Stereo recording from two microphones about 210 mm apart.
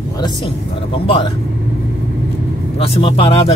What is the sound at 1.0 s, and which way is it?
Speech, 25° left (ahead or behind).